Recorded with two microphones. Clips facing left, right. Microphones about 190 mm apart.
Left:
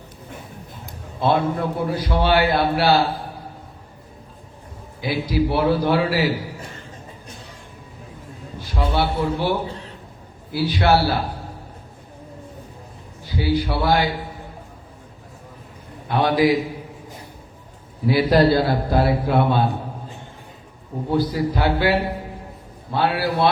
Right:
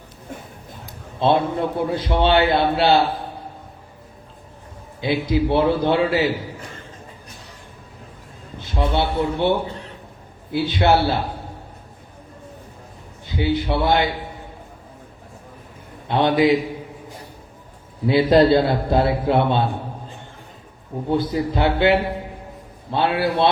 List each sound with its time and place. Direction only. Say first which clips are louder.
1.2 s a man's voice: right 1 dB; 25° right (ahead or behind)
4.9 s a man's voice: right 1 dB; 25° right (ahead or behind)
8.5 s a man's voice: right 1 dB; 25° right (ahead or behind)
13.2 s a man's voice: even; 25° right (ahead or behind)
16.0 s a man's voice: right 1 dB; 25° right (ahead or behind)
18.0 s a man's voice: right 2 dB; 25° right (ahead or behind)
21.1 s a man's voice: even; 25° right (ahead or behind)